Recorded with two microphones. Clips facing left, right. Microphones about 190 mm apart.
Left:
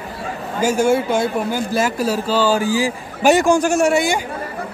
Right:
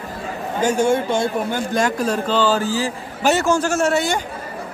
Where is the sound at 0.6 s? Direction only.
10° left (ahead or behind).